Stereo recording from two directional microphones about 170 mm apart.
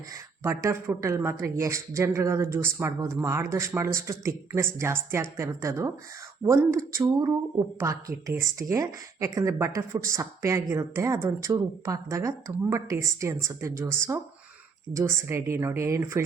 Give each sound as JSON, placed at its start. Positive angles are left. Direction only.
{"t": 0.1, "sound": "speech", "side_deg": -15}